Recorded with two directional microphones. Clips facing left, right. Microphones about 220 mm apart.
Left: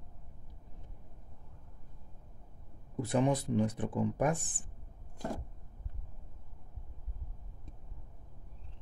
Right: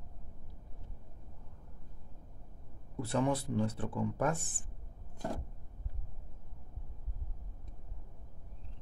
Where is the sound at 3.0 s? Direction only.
15° left (ahead or behind).